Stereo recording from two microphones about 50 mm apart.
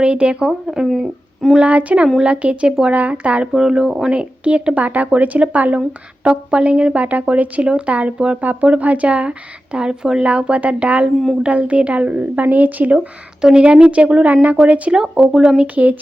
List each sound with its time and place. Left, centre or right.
0.0 s speech: right
0.9 s speech: centre
1.5 s speech: right
3.5 s speech: centre
4.1 s speech: right
13.4 s speech: centre
14.9 s speech: centre
15.6 s speech: right